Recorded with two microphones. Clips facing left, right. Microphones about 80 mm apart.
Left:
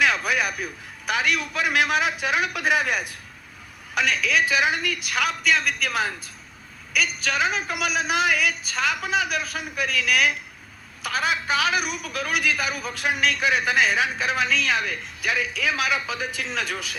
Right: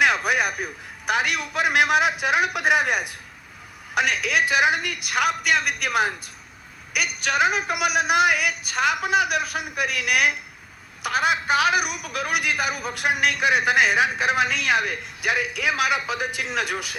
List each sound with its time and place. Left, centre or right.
0.0 s a man's voice: right